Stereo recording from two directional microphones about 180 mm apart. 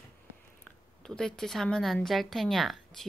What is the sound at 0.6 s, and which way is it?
A woman's voice, 5° left (ahead or behind).